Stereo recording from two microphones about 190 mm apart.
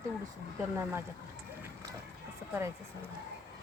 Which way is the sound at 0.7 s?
10° right (ahead or behind).